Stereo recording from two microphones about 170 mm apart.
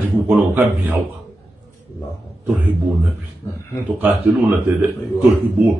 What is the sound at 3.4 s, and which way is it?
Speech, 25° left (ahead or behind).